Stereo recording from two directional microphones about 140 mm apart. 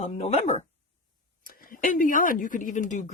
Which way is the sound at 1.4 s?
90° left.